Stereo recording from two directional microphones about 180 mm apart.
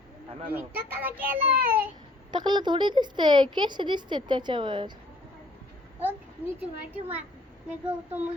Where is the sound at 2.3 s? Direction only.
25° right (ahead or behind).